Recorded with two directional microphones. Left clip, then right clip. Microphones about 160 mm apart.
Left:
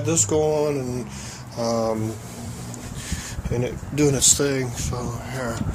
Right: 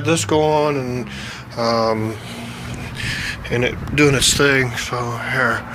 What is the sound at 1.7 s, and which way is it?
Speech, 20° left (ahead or behind).